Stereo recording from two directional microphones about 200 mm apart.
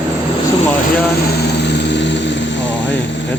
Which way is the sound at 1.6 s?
60° left (ahead or behind).